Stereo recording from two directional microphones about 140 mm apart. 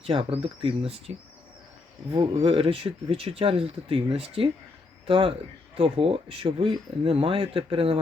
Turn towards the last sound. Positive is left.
turn(degrees=-40)  # may be behind; listen again after turning